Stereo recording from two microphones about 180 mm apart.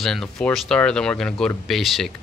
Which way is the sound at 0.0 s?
Centre (ahead or behind).